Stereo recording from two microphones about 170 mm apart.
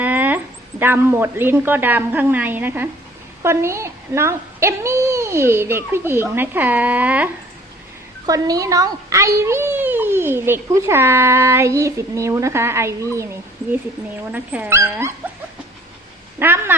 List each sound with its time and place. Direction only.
0.0 s a sound: 10° right (ahead or behind)
0.8 s a child's voice: 15° right (ahead or behind)
8.3 s a child's voice: 20° right (ahead or behind)
14.3 s a child's voice: 10° right (ahead or behind)
16.4 s a child's voice: 10° right (ahead or behind)